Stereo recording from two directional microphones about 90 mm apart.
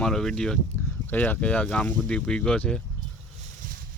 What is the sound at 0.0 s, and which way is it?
Speech, 5° left (ahead or behind).